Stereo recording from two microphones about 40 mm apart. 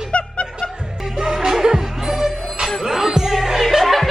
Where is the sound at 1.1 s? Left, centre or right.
Centre.